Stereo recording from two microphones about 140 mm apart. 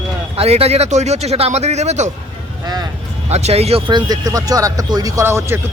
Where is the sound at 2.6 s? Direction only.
30° right (ahead or behind).